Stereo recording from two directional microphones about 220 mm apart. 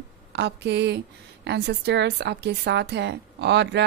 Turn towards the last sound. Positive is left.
turn(degrees=-50)  # may be behind; listen again after turning